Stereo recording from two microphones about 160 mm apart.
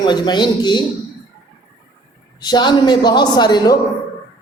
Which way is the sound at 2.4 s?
25° left (ahead or behind).